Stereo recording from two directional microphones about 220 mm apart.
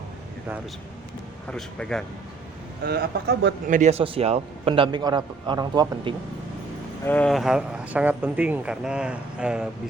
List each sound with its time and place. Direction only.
1.5 s speech: 5° left (ahead or behind)
2.8 s speech: 45° right (ahead or behind)
3.8 s a man's voice: 30° right (ahead or behind)
7.0 s speech: 5° left (ahead or behind)